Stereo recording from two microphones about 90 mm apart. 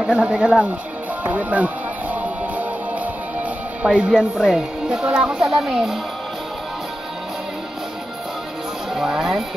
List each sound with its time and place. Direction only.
0.0 s speech: 10° right (ahead or behind)
1.2 s music: 15° right (ahead or behind)
3.8 s speech: 10° right (ahead or behind)
8.9 s a sound: 5° right (ahead or behind)